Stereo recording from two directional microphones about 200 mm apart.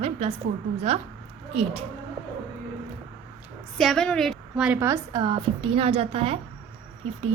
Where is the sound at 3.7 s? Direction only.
Centre (ahead or behind); by 6.4 s 30° right (ahead or behind).